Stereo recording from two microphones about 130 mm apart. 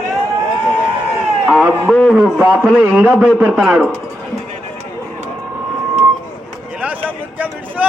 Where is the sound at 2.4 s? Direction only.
15° right (ahead or behind).